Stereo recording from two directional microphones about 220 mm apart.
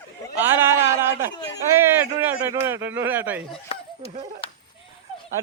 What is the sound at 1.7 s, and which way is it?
Speech, 10° right (ahead or behind).